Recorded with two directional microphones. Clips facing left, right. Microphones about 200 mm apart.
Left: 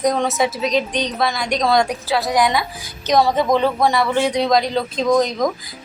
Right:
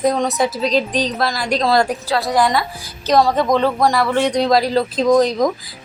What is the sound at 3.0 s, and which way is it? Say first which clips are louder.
Speech: right 1 dB; centre (ahead or behind).